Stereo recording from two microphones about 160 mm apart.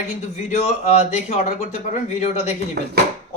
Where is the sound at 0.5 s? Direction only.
45° left (ahead or behind).